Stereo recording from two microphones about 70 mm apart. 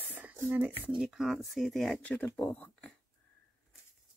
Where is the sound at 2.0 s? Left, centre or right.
Left.